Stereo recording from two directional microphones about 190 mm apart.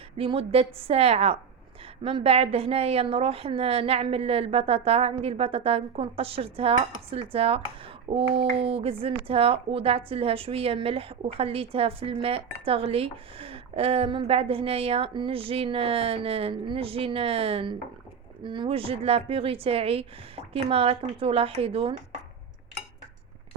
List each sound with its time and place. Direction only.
0.2 s a woman's voice: 30° right (ahead or behind)